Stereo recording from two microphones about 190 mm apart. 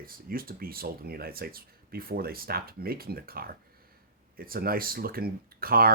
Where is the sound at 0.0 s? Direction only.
50° right (ahead or behind).